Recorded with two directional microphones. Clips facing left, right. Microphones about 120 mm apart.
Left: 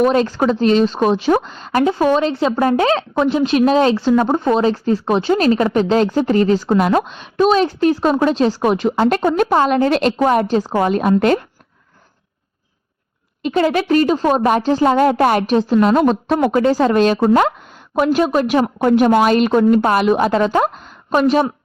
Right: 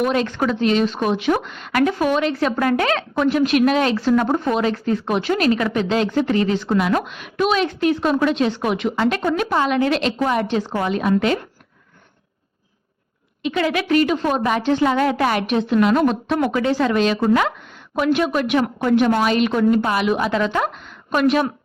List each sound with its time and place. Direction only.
0.0 s speech: 35° left (ahead or behind)
13.4 s a woman's voice: 40° left (ahead or behind)